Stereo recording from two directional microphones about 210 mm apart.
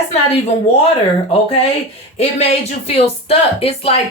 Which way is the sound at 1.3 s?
30° left (ahead or behind).